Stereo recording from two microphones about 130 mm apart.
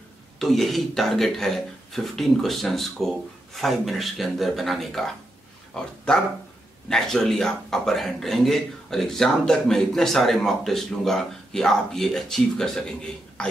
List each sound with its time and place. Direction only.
0.4 s a man's voice: centre (ahead or behind)
5.8 s dog: 5° left (ahead or behind)
6.9 s a man's voice: 5° left (ahead or behind)